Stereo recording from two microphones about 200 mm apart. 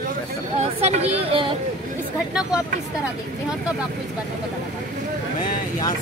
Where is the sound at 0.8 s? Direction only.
30° right (ahead or behind).